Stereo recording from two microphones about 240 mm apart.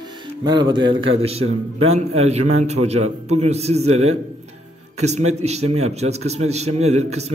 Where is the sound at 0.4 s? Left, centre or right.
Centre.